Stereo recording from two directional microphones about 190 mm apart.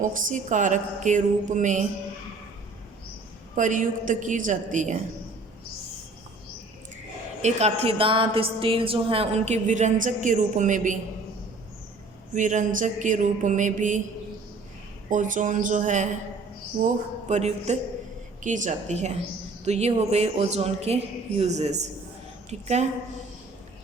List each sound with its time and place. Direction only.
0.0 s a woman's voice: 40° right (ahead or behind)
3.5 s a woman's voice: 40° right (ahead or behind)
7.4 s a woman's voice: 35° right (ahead or behind)
12.3 s a woman's voice: 40° right (ahead or behind)
15.1 s a woman's voice: 45° right (ahead or behind)